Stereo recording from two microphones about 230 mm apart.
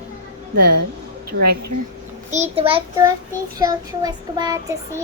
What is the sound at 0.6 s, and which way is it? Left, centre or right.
Speech, right.